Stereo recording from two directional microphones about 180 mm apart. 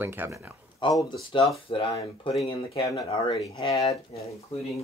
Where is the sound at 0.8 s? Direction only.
25° left (ahead or behind).